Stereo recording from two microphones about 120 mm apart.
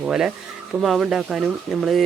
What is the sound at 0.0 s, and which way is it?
Speech, 5° right (ahead or behind).